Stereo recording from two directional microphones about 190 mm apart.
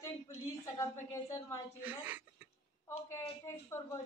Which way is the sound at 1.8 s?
10° right (ahead or behind).